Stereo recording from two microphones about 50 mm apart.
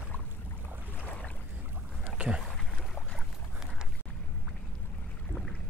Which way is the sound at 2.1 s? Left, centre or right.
Right.